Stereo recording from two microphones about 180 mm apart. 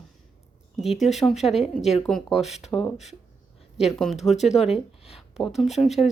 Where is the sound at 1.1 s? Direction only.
Centre (ahead or behind).